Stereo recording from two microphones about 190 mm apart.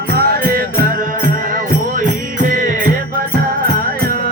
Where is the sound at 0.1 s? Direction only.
50° right (ahead or behind).